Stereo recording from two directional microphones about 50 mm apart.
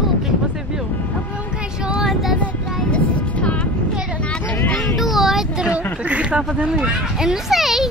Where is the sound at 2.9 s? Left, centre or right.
Left.